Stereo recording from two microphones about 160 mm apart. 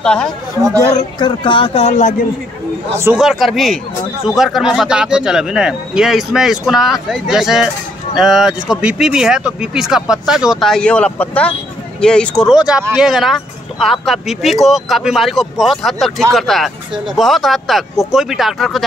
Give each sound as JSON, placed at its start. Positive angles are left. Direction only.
{"t": 0.0, "sound": "speech", "side_deg": 5}
{"t": 0.9, "sound": "speech", "side_deg": 30}
{"t": 3.2, "sound": "speech", "side_deg": 0}